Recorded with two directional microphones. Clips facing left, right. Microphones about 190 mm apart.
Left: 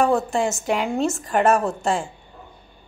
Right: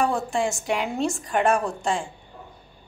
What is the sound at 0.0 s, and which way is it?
A woman's voice, centre (ahead or behind).